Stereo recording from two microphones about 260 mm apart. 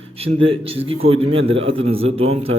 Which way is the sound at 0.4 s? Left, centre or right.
Right.